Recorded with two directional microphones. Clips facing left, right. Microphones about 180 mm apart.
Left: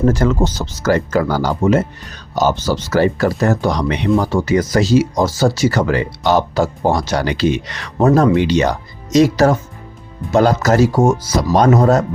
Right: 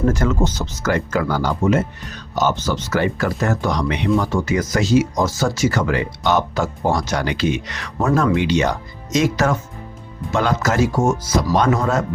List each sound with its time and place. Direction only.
0.1 s speech: 35° left (ahead or behind)